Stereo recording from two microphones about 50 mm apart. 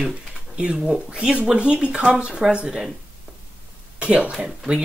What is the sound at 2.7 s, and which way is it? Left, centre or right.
Speech, centre.